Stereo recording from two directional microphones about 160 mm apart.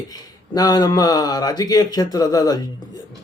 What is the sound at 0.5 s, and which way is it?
A man's voice, 25° left (ahead or behind).